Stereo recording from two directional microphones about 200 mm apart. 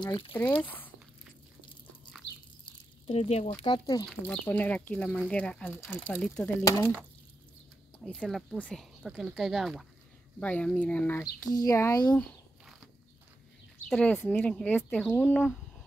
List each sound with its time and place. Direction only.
0.0 s speech: 20° left (ahead or behind)
0.3 s speech: 10° left (ahead or behind)
2.6 s speech: 25° left (ahead or behind)
4.3 s speech: 10° left (ahead or behind)
8.0 s speech: centre (ahead or behind); by 12.2 s 20° left (ahead or behind)
13.8 s speech: 5° left (ahead or behind)